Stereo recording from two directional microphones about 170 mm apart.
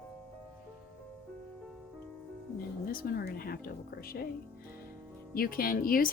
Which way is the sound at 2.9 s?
60° left (ahead or behind).